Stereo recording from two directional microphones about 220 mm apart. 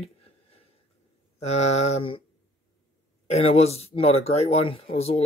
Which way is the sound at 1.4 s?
30° left (ahead or behind).